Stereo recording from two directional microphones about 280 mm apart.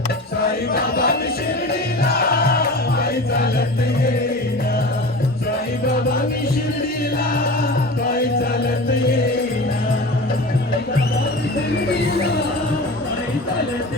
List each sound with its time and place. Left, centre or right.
0.7 s chant: left
2.0 s music: left